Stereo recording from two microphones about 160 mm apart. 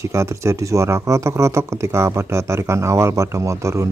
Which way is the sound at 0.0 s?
20° right (ahead or behind).